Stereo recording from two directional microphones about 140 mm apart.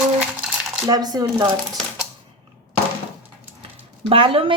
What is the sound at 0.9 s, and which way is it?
Speech, 25° right (ahead or behind).